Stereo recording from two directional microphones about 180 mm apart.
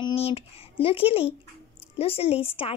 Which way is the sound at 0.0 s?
35° left (ahead or behind).